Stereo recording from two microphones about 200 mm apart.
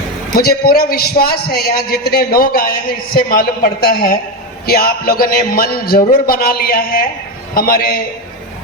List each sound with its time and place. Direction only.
0.3 s a man's voice: 50° left (ahead or behind)